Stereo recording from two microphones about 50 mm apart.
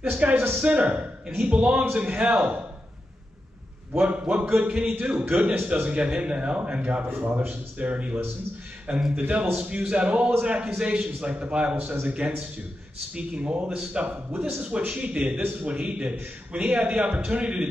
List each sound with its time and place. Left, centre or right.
0.0 s a man's voice: right
4.0 s a man's voice: right
5.3 s a man's voice: right
5.9 s a man's voice: right
7.1 s speech: right
7.3 s a man's voice: right
11.7 s a man's voice: right
13.7 s speech: centre
14.0 s a man's voice: right